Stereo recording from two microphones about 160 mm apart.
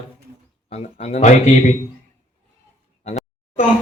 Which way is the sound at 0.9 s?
45° left (ahead or behind).